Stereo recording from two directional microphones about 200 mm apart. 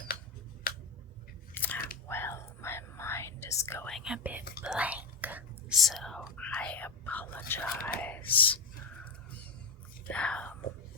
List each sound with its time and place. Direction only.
0.7 s a sound: 45° left (ahead or behind)
1.5 s biting: 10° left (ahead or behind)
2.0 s whispering: 10° left (ahead or behind)
3.9 s speech: 5° right (ahead or behind)
8.3 s gasp: 10° left (ahead or behind)
10.1 s speech: 5° left (ahead or behind)